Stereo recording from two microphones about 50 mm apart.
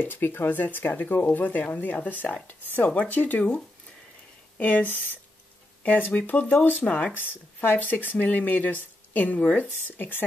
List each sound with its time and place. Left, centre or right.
0.0 s speech: left
4.6 s speech: left